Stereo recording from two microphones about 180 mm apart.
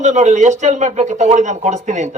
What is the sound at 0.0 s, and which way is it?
A man's voice, 40° right (ahead or behind).